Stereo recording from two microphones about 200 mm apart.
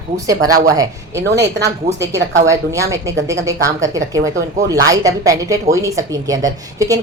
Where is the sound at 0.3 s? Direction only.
15° right (ahead or behind).